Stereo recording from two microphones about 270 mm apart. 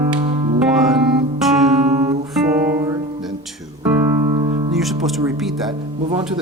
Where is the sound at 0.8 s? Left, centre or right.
Centre.